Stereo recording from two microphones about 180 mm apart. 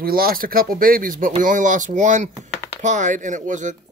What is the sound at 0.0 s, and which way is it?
A child's voice, 55° right (ahead or behind).